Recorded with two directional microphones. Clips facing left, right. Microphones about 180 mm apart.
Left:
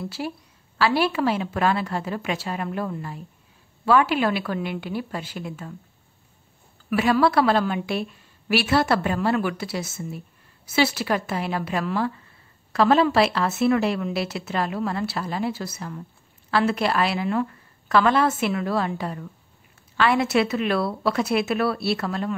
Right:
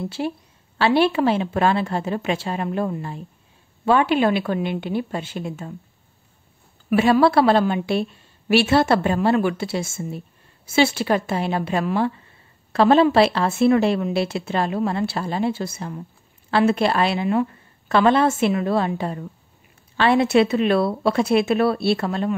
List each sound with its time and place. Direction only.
0.0 s a woman's voice: 25° right (ahead or behind)
6.9 s a woman's voice: 25° right (ahead or behind)